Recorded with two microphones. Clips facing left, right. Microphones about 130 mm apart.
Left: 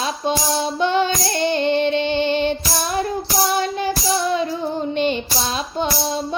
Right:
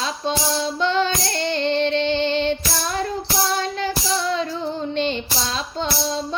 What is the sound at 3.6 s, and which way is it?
Child singing, 15° left (ahead or behind).